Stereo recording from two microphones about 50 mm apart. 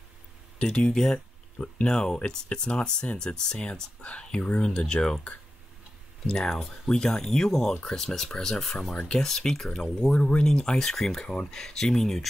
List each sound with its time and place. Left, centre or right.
0.7 s speech: centre